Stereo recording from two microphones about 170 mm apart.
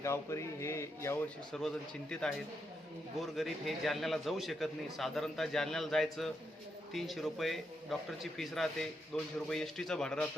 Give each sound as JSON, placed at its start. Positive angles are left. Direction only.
{"t": 0.0, "sound": "speech", "side_deg": 15}
{"t": 1.5, "sound": "a man's voice", "side_deg": 5}